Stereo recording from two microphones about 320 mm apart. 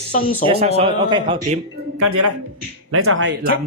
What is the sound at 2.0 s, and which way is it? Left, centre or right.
A man's voice, right.